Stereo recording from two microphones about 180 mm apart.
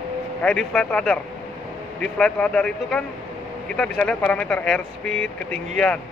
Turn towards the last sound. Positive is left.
turn(degrees=5)  # may be behind; listen again after turning